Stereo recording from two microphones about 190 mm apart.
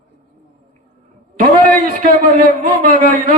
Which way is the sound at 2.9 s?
45° right (ahead or behind).